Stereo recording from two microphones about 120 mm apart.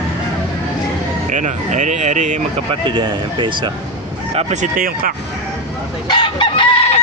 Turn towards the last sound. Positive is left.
turn(degrees=55)  # may be behind; listen again after turning